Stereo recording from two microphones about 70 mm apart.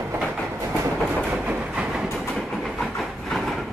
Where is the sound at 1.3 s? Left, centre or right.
Centre.